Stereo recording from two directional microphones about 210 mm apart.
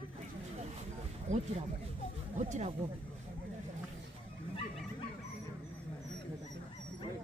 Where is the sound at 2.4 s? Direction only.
35° right (ahead or behind).